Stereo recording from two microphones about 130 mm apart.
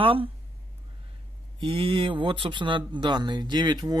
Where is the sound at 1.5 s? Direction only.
40° right (ahead or behind).